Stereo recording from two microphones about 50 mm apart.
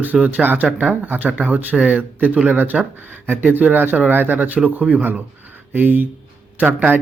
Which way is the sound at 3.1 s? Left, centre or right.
Right.